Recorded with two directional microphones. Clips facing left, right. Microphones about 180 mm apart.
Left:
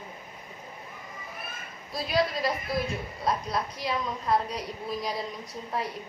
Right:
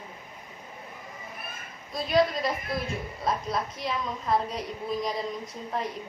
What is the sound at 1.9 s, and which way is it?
A woman's voice, centre (ahead or behind).